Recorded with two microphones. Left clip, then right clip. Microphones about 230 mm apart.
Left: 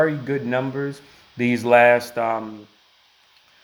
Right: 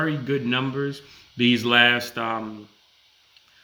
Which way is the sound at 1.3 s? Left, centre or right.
Right.